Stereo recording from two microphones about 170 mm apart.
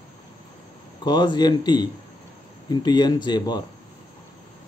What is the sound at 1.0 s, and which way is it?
Speech, 25° left (ahead or behind).